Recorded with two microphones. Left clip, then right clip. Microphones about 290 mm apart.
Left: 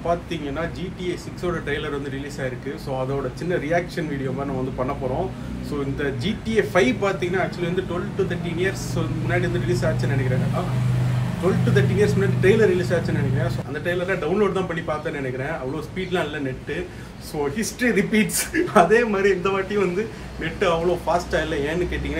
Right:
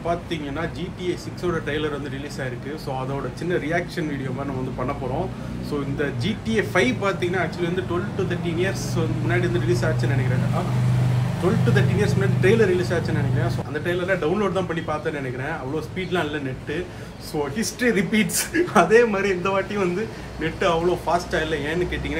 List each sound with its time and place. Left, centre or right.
0.3 s speech: centre
3.4 s speech: centre
5.9 s speech: centre
11.7 s speech: centre
17.6 s speech: centre